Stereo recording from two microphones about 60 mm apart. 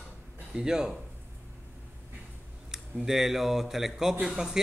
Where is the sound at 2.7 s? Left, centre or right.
Centre.